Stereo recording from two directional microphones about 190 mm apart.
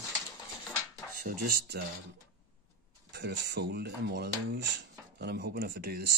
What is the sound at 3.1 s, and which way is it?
Speech, 60° right (ahead or behind).